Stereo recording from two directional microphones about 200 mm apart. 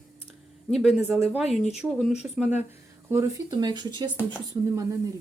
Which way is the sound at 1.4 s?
35° left (ahead or behind).